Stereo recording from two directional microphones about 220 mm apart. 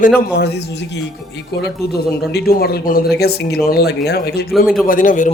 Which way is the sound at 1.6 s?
45° left (ahead or behind).